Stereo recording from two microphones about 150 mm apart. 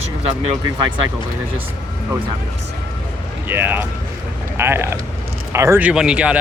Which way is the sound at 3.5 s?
15° right (ahead or behind).